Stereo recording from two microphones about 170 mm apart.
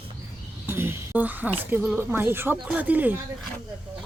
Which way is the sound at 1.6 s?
10° right (ahead or behind).